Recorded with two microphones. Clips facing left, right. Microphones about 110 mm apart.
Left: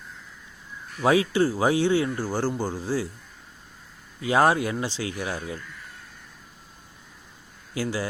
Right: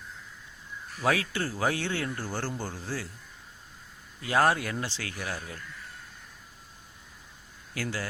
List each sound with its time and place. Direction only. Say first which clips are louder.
1.0 s speech: left 8 dB; 20° left (ahead or behind)
4.2 s speech: left 4 dB; 20° left (ahead or behind)
7.7 s speech: left 6 dB; 15° left (ahead or behind)